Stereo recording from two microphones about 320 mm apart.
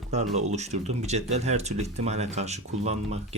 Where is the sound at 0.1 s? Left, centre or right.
Right.